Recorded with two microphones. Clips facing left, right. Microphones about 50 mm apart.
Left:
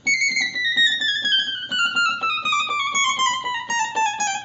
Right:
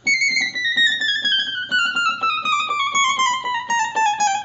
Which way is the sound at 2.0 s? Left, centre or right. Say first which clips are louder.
Right 2 dB; centre.